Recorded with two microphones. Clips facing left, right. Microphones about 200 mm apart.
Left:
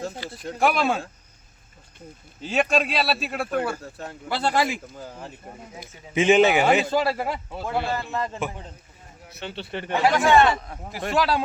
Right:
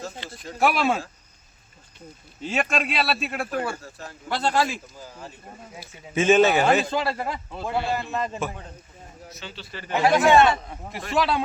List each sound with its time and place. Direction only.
0.6 s a man's voice: centre (ahead or behind)
2.4 s a man's voice: centre (ahead or behind)
4.3 s a man's voice: 10° left (ahead or behind)
5.8 s a man's voice: 15° left (ahead or behind)
8.1 s a man's voice: 20° right (ahead or behind)
9.3 s a man's voice: 60° left (ahead or behind)
10.1 s a man's voice: 20° right (ahead or behind)
10.5 s a man's voice: centre (ahead or behind)